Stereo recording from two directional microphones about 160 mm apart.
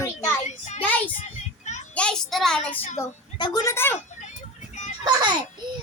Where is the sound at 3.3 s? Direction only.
25° left (ahead or behind).